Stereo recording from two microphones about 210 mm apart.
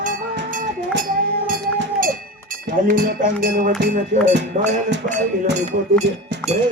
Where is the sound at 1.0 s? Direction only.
40° right (ahead or behind).